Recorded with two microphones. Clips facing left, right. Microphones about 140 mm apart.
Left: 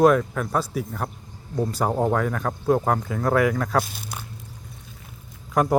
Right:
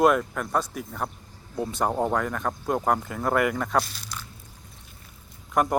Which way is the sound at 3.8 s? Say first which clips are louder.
Left 4 dB; 55° left (ahead or behind).